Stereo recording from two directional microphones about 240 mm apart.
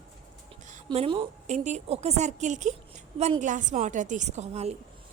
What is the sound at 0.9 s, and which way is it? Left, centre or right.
A woman's voice, right.